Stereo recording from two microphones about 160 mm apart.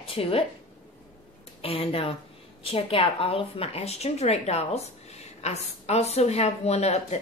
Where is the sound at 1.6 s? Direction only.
35° left (ahead or behind).